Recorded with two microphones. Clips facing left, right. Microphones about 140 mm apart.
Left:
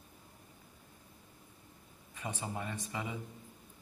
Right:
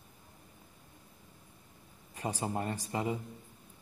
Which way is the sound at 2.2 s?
40° right (ahead or behind).